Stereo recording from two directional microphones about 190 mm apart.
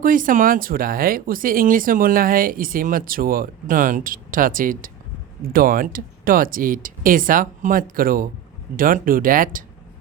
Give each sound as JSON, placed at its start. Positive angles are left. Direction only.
{"t": 0.0, "sound": "speech", "side_deg": -45}